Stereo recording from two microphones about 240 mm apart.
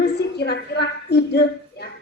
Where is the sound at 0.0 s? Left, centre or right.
Left.